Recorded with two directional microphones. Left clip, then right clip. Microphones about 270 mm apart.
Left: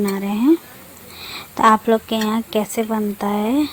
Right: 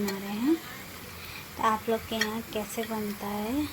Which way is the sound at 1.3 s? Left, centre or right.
Left.